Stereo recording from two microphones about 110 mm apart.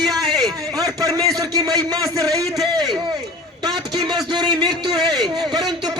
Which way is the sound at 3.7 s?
40° right (ahead or behind).